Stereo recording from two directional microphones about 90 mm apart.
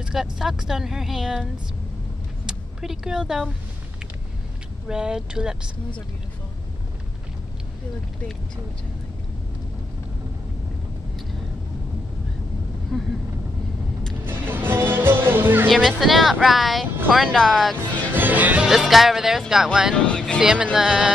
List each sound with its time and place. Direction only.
0.0 s speech: 5° right (ahead or behind)
4.8 s speech: 10° right (ahead or behind)
12.9 s speech: 5° left (ahead or behind)
14.2 s music: 25° right (ahead or behind)
15.7 s speech: centre (ahead or behind)
18.1 s music: 20° right (ahead or behind)
18.7 s speech: 5° right (ahead or behind)
20.1 s speech: 10° left (ahead or behind)
20.3 s speech: 10° right (ahead or behind)